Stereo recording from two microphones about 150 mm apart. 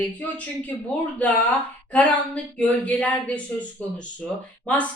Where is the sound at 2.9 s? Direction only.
10° left (ahead or behind).